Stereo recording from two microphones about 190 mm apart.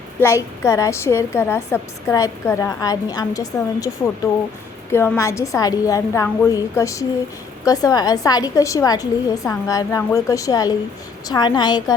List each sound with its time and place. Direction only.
0.2 s a woman's voice: 15° left (ahead or behind)